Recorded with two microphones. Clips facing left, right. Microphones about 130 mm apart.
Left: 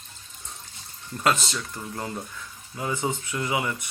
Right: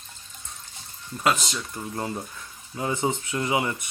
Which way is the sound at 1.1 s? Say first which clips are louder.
Even; 5° right (ahead or behind).